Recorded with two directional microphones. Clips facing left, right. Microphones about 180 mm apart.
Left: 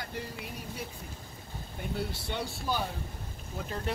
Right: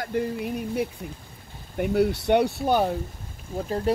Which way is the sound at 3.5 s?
35° right (ahead or behind).